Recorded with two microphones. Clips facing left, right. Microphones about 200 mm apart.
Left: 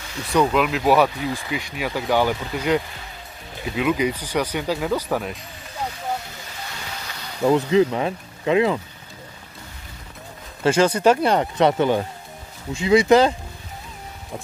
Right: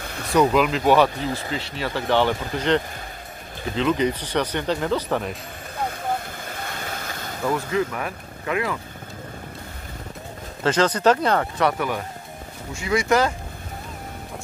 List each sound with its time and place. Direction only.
0.0 s a sound: 55° right (ahead or behind)
0.3 s speech: centre (ahead or behind)
5.9 s boat: 55° right (ahead or behind)
7.4 s speech: 20° left (ahead or behind)
10.6 s speech: 10° left (ahead or behind)